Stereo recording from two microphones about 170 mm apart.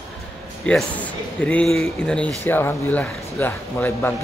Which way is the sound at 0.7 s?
5° left (ahead or behind).